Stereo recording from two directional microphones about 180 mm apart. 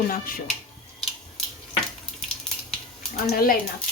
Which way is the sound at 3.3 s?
55° left (ahead or behind).